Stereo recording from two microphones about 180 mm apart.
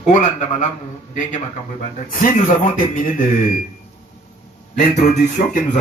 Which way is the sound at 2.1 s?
45° left (ahead or behind).